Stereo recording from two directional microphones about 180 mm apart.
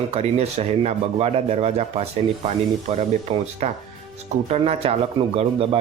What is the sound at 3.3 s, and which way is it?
Speech, 30° right (ahead or behind).